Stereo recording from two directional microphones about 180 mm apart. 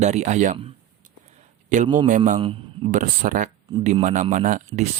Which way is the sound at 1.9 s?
45° right (ahead or behind).